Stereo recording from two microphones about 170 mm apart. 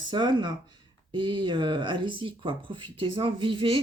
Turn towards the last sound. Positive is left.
turn(degrees=-30)  # may be behind; listen again after turning